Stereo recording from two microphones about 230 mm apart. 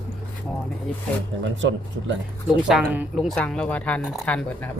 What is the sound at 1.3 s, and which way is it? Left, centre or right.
Speech, right.